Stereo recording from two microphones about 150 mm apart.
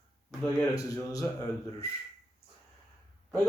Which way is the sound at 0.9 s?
20° left (ahead or behind).